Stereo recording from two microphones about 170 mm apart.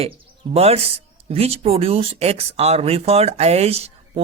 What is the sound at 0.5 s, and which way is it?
Speech, 35° right (ahead or behind).